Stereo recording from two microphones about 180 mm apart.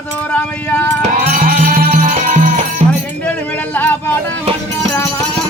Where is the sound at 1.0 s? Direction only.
45° right (ahead or behind).